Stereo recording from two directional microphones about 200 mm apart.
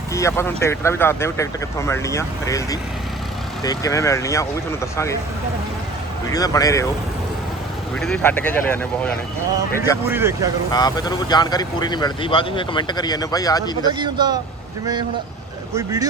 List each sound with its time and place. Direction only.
0.1 s speech: 15° left (ahead or behind)
6.3 s speech: 20° left (ahead or behind)
7.9 s speech: 5° left (ahead or behind)
10.1 s speech: 10° right (ahead or behind)
10.7 s speech: 20° left (ahead or behind)
13.8 s speech: 20° right (ahead or behind)
15.7 s speech: 15° right (ahead or behind)